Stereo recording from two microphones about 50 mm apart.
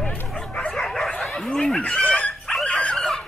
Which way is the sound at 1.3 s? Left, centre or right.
Centre.